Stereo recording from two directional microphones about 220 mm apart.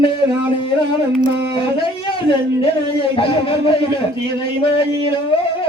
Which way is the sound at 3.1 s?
25° left (ahead or behind).